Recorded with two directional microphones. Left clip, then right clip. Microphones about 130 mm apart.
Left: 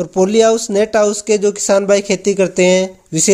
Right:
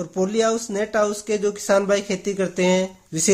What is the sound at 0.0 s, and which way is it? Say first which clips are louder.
Speech: left 9 dB; 45° left (ahead or behind).